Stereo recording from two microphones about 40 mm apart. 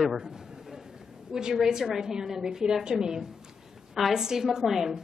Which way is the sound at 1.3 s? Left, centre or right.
Centre.